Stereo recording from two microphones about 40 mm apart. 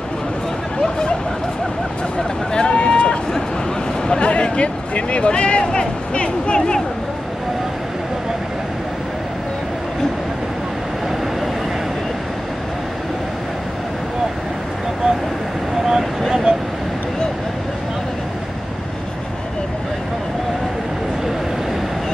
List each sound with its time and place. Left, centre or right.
2.1 s vehicle: centre
2.7 s a sound: left
4.1 s speech: left
15.8 s vehicle: centre
16.5 s vehicle: right